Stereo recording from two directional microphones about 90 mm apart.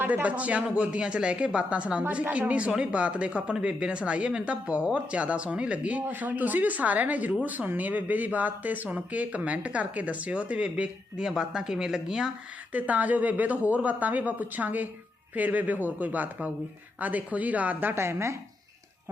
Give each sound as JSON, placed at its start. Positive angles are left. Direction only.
{"t": 0.0, "sound": "speech", "side_deg": -15}
{"t": 12.7, "sound": "a woman's voice", "side_deg": -15}